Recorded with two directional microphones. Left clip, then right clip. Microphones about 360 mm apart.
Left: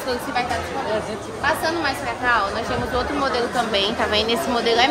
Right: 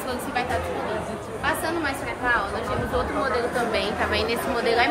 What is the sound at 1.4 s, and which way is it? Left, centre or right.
Speech, centre.